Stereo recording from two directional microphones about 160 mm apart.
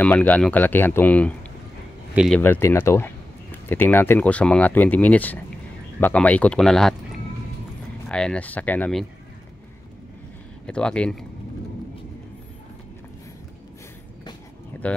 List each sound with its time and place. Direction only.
0.0 s speech: 10° left (ahead or behind)
2.1 s speech: centre (ahead or behind)
2.4 s speech: 15° left (ahead or behind)
8.1 s speech: 5° left (ahead or behind)
10.7 s speech: 5° left (ahead or behind)
14.8 s speech: 10° left (ahead or behind)